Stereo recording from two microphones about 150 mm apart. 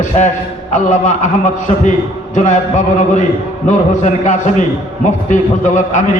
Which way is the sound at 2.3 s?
55° left (ahead or behind).